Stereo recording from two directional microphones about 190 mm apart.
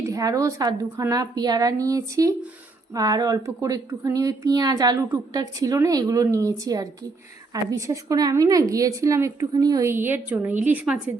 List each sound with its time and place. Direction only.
0.1 s a woman's voice: 20° right (ahead or behind)